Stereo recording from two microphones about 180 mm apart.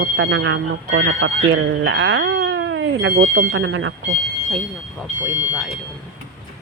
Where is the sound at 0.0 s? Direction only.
90° right.